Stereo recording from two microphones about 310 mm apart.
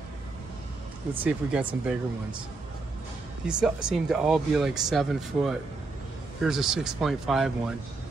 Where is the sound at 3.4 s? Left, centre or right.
Centre.